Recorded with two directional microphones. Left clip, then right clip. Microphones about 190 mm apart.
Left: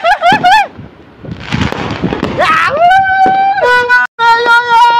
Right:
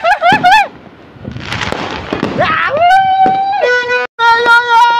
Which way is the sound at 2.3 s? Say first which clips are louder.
Left 3 dB; 15° left (ahead or behind).